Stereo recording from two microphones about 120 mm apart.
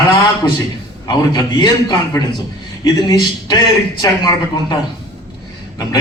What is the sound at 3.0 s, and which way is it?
A man's voice, 35° left (ahead or behind).